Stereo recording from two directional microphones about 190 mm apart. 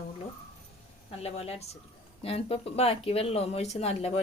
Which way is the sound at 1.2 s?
30° left (ahead or behind).